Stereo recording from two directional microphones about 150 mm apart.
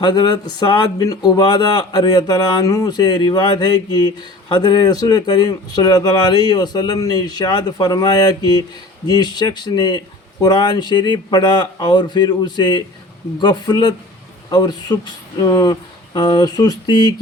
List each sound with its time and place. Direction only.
0.0 s speech: 30° left (ahead or behind)